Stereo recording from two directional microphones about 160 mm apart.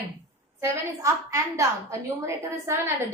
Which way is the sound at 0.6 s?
20° right (ahead or behind).